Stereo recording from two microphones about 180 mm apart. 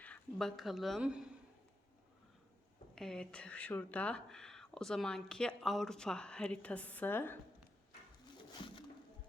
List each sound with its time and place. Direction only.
0.0 s a woman's voice: 5° left (ahead or behind)
2.9 s speech: 5° left (ahead or behind)
8.5 s music: 25° left (ahead or behind)